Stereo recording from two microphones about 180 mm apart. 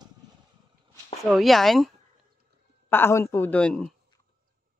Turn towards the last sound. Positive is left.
turn(degrees=5)  # may be behind; listen again after turning